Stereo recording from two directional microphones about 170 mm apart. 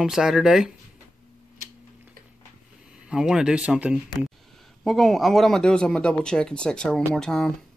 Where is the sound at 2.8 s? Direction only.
5° right (ahead or behind).